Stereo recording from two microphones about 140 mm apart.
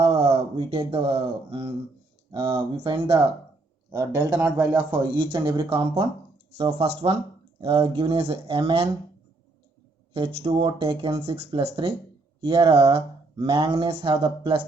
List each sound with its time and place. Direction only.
0.0 s speech: 45° right (ahead or behind)
3.9 s speech: 25° right (ahead or behind)
4.6 s speech: 30° right (ahead or behind)
10.2 s speech: 40° right (ahead or behind)